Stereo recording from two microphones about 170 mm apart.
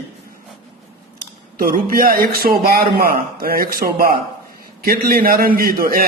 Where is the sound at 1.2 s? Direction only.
60° right (ahead or behind).